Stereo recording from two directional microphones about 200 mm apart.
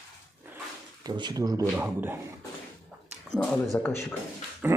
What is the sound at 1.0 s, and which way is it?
Speech, 20° right (ahead or behind).